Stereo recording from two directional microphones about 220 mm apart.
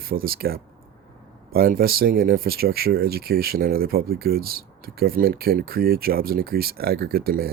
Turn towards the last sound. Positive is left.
turn(degrees=-45)  # may be behind; listen again after turning